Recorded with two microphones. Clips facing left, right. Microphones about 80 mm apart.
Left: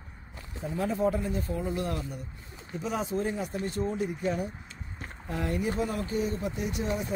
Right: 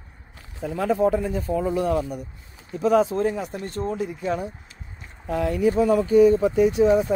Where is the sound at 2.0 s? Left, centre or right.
Right.